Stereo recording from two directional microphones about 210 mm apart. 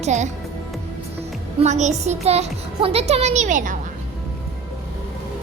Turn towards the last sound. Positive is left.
turn(degrees=-40)  # may be behind; listen again after turning